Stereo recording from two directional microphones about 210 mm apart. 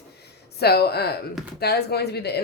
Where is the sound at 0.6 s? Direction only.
50° left (ahead or behind).